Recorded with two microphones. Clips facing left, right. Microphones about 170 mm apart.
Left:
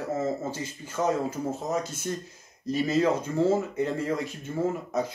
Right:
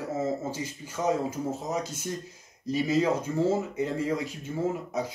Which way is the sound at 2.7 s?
10° right (ahead or behind).